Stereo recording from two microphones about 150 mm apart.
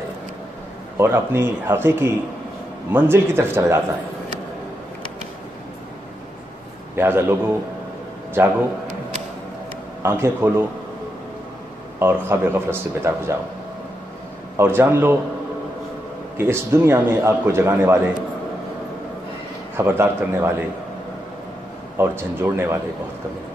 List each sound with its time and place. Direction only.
0.9 s a man's voice: 15° right (ahead or behind)
7.0 s a man's voice: 15° right (ahead or behind)
10.0 s a man's voice: 15° right (ahead or behind)
12.0 s a man's voice: 15° right (ahead or behind)
14.6 s a man's voice: 15° right (ahead or behind)
16.3 s a man's voice: 15° right (ahead or behind)
19.8 s a man's voice: 15° right (ahead or behind)
21.9 s a man's voice: 15° right (ahead or behind)